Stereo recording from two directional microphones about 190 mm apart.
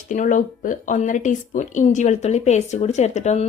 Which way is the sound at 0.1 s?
40° left (ahead or behind).